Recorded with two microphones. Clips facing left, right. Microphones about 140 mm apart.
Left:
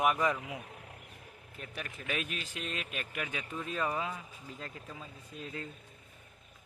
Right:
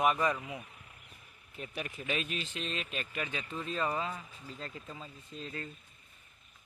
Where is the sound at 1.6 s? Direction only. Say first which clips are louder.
Right 3 dB; 45° left (ahead or behind).